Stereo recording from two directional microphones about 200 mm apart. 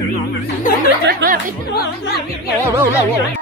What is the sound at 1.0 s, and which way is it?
Speech, 45° right (ahead or behind).